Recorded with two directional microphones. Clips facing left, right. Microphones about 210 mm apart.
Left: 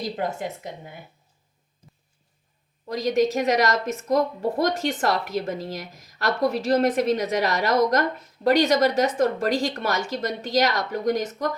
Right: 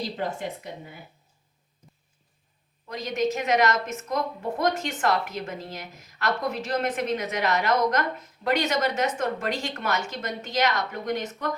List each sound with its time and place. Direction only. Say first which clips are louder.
2.9 s a woman's voice: left 5 dB; 35° left (ahead or behind)